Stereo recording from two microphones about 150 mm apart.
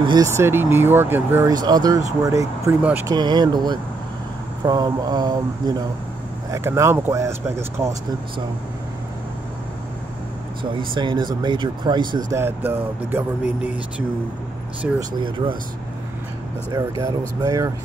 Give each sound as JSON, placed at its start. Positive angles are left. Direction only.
{"t": 0.0, "sound": "speech", "side_deg": -30}
{"t": 0.3, "sound": "speech", "side_deg": -15}
{"t": 1.5, "sound": "speech", "side_deg": -25}
{"t": 3.1, "sound": "speech", "side_deg": -30}
{"t": 11.0, "sound": "speech", "side_deg": -30}
{"t": 12.3, "sound": "speech", "side_deg": -15}
{"t": 15.0, "sound": "speech", "side_deg": -30}
{"t": 16.7, "sound": "speech", "side_deg": -25}